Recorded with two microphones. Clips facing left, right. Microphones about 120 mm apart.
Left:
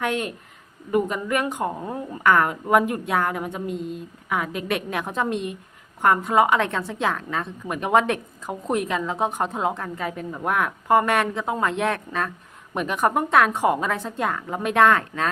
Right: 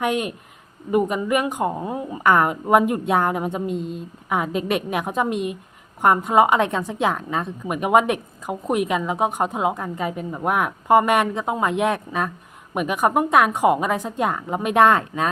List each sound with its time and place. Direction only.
0.0 s a woman's voice: 15° right (ahead or behind)